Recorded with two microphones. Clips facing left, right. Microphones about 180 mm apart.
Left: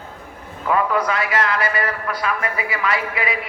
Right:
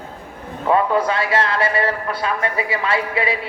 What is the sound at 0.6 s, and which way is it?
A man's voice, 30° right (ahead or behind).